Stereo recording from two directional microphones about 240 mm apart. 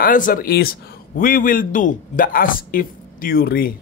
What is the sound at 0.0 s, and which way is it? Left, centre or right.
A man's voice, left.